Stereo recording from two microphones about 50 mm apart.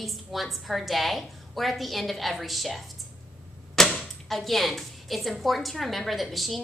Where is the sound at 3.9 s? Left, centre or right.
Centre.